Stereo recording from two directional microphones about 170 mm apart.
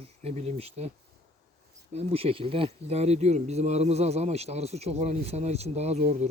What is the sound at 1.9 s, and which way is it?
Speech, 40° right (ahead or behind).